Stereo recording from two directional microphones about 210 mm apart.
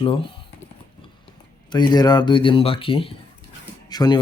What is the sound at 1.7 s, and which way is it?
Speech, 20° left (ahead or behind).